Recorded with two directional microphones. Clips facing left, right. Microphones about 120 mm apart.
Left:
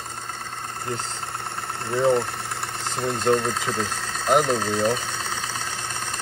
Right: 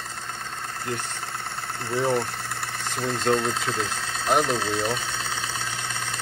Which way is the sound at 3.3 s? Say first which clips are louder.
Left 2 dB; 5° left (ahead or behind).